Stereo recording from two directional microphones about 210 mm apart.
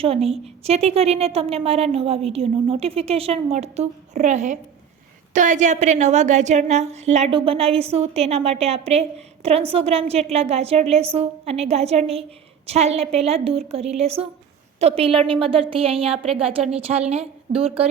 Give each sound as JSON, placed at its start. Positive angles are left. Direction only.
{"t": 0.0, "sound": "a woman's voice", "side_deg": -30}